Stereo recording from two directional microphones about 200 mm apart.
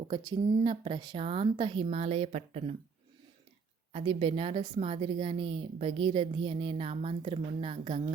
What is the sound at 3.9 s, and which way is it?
Speech, 30° right (ahead or behind).